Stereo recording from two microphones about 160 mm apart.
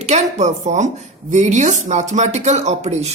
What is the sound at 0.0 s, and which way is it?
Speech, 45° right (ahead or behind).